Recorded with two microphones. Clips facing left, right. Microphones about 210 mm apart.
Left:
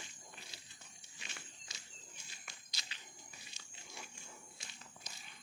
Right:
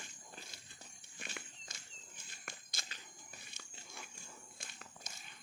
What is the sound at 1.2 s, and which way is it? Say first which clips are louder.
Walk: right 6 dB; 50° right (ahead or behind).